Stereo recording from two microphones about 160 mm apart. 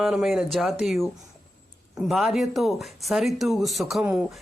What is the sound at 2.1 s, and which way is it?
Speech, centre (ahead or behind).